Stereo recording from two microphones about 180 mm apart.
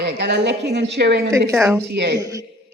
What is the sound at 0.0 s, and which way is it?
A woman's voice, 75° right (ahead or behind).